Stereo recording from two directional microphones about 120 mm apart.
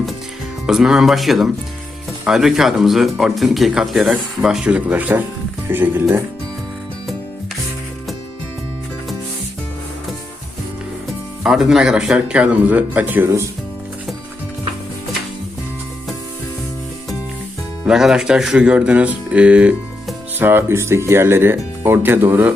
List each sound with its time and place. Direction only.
0.7 s speech: 5° right (ahead or behind); by 6.2 s 20° right (ahead or behind)
11.4 s speech: 5° right (ahead or behind)
17.8 s speech: 5° right (ahead or behind)